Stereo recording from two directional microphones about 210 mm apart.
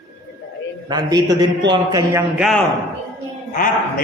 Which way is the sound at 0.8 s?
20° right (ahead or behind).